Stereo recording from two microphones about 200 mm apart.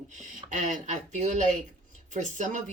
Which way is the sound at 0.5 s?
40° right (ahead or behind).